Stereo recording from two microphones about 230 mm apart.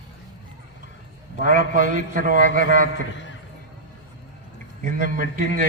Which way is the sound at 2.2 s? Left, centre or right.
Right.